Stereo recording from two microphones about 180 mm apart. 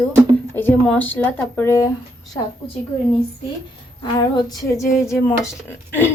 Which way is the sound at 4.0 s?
25° left (ahead or behind).